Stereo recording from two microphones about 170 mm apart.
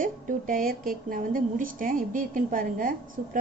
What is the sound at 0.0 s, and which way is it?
A woman's voice, 55° right (ahead or behind).